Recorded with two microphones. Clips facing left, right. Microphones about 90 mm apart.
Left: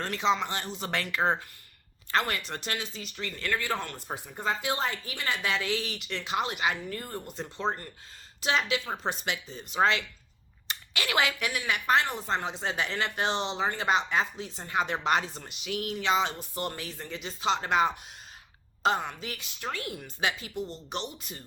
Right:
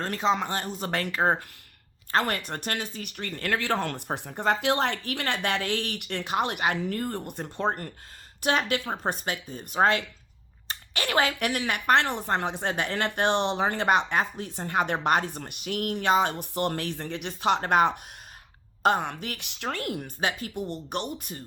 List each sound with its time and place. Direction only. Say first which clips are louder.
0.0 s a woman's voice: right 2 dB; 40° right (ahead or behind)
3.5 s a woman's voice: right 5 dB; 70° right (ahead or behind); by 10.0 s 50° right (ahead or behind)
10.7 s a sound: right 2 dB; 35° right (ahead or behind)
11.3 s a woman's voice: right 3 dB; 60° right (ahead or behind)